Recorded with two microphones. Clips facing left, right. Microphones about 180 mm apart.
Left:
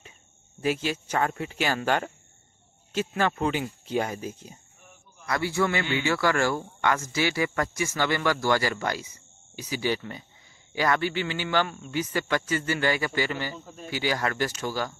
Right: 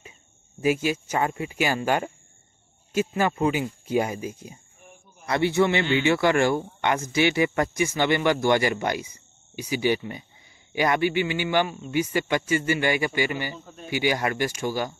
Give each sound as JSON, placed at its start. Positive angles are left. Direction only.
{"t": 0.6, "sound": "a man's voice", "side_deg": -10}
{"t": 5.2, "sound": "a man's voice", "side_deg": -25}